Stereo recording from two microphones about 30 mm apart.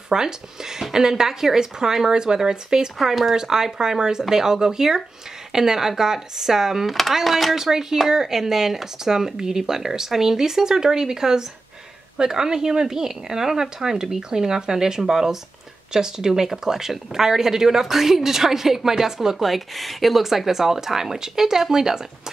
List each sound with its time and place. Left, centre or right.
0.1 s speech: centre
3.0 s speech: centre
6.9 s speech: centre
7.5 s speech: centre
19.3 s speech: centre